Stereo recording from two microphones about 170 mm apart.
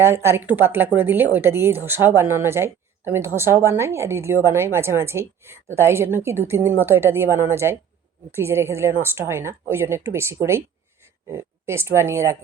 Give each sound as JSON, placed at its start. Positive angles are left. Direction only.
{"t": 0.0, "sound": "speech", "side_deg": -15}